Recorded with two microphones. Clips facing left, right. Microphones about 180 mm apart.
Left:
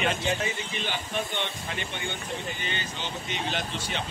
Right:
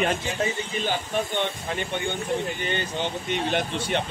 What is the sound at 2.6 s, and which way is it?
Speech, 55° right (ahead or behind).